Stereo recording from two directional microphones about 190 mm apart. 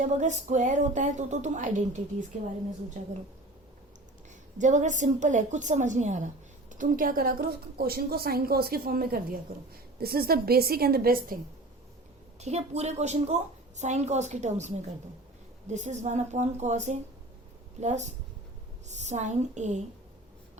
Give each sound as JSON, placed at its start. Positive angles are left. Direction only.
{"t": 0.0, "sound": "a woman's voice", "side_deg": -40}
{"t": 4.5, "sound": "a woman's voice", "side_deg": -40}
{"t": 12.4, "sound": "a woman's voice", "side_deg": -35}